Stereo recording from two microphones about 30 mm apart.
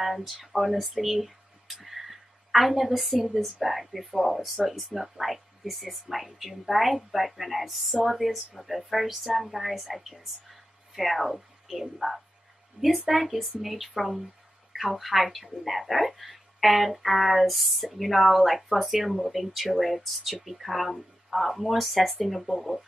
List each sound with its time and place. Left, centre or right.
0.0 s a woman's voice: centre
12.8 s speech: right
13.1 s a woman's voice: centre